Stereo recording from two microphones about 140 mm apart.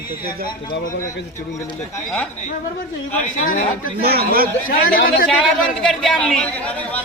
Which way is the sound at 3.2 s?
70° left (ahead or behind).